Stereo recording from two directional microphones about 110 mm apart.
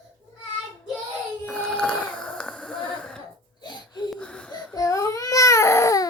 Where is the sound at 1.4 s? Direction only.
10° left (ahead or behind).